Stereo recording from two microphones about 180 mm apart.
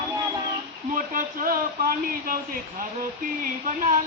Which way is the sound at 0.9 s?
50° right (ahead or behind).